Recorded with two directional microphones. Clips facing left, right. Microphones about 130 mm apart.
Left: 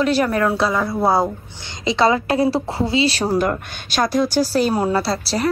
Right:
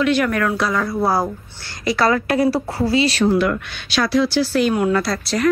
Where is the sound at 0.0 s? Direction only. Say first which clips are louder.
Even; 35° left (ahead or behind).